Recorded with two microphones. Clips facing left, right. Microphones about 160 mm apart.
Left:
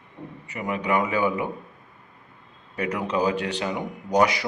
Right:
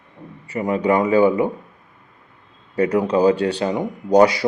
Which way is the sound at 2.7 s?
30° right (ahead or behind).